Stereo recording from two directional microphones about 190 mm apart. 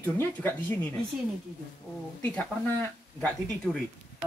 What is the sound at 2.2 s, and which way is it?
Speech, 10° left (ahead or behind).